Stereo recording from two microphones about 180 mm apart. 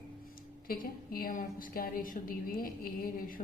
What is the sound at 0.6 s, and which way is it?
A woman's voice, 55° left (ahead or behind).